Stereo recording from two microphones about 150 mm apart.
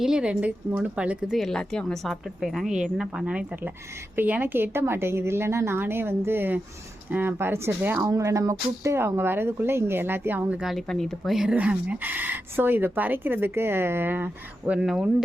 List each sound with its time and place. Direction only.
0.0 s a woman's voice: 5° right (ahead or behind)